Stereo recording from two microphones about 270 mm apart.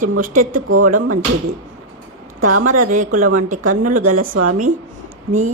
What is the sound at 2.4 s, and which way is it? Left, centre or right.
A woman's voice, right.